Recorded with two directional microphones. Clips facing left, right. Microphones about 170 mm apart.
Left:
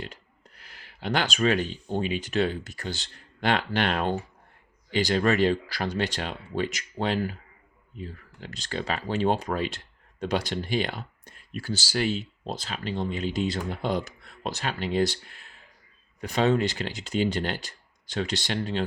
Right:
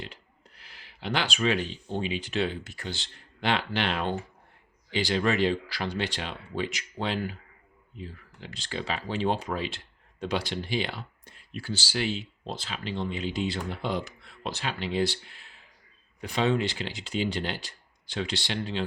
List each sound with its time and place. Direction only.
0.0 s speech: 45° left (ahead or behind)